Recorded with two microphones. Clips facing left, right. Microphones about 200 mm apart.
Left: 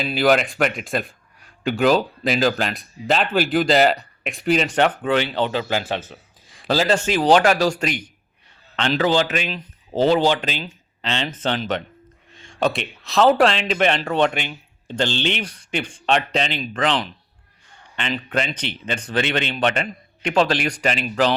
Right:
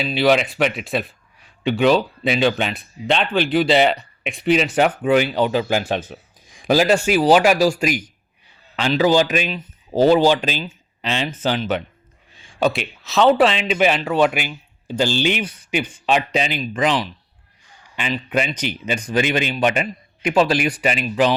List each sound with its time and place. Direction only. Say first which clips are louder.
0.0 s a man's voice: right 1 dB; centre (ahead or behind)